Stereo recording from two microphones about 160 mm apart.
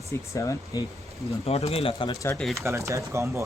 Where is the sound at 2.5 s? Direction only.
20° right (ahead or behind).